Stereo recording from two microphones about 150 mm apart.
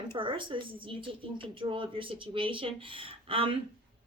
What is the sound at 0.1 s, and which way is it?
A woman's voice, 35° right (ahead or behind).